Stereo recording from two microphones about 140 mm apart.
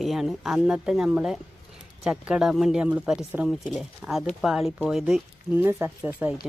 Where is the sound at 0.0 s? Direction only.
Centre (ahead or behind).